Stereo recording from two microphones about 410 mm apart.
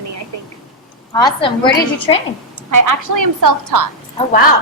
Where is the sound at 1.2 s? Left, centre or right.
Centre.